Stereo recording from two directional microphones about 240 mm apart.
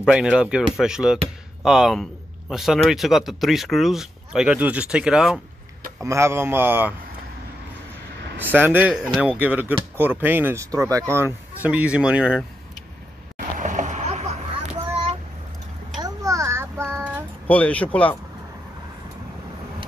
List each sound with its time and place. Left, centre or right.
0.0 s speech: centre
8.5 s speech: centre
13.6 s boat: right
16.0 s a sound: centre
17.5 s speech: centre